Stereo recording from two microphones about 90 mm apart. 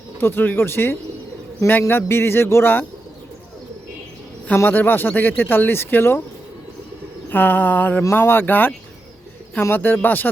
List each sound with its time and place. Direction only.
0.2 s speech: 25° left (ahead or behind)
4.4 s speech: 20° left (ahead or behind)
7.3 s speech: 20° left (ahead or behind)